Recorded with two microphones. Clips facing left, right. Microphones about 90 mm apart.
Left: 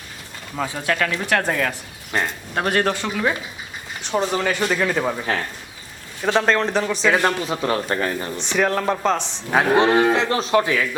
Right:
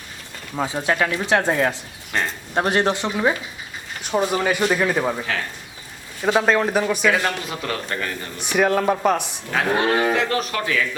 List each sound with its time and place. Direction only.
0.6 s speech: 20° right (ahead or behind)
2.1 s speech: 10° left (ahead or behind)
2.6 s a man's voice: 20° right (ahead or behind); by 5.2 s 5° right (ahead or behind)
6.2 s a man's voice: 5° right (ahead or behind)
7.1 s a man's voice: 30° left (ahead or behind)
8.4 s a man's voice: 10° right (ahead or behind)
9.5 s speech: 25° left (ahead or behind)